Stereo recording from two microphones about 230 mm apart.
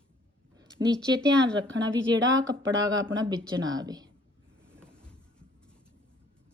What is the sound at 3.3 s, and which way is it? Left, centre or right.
Speech, centre.